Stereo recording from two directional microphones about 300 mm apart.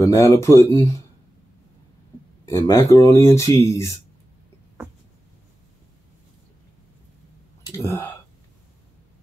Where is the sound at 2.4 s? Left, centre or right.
Centre.